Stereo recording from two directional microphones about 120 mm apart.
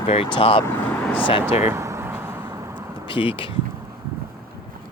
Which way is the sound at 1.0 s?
15° left (ahead or behind).